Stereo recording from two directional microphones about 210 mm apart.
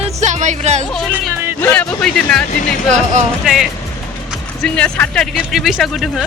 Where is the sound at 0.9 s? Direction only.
Centre (ahead or behind).